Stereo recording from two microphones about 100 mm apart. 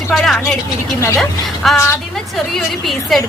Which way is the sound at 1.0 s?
30° left (ahead or behind).